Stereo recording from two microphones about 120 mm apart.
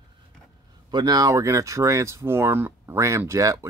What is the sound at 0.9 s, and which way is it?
Speech, 30° right (ahead or behind).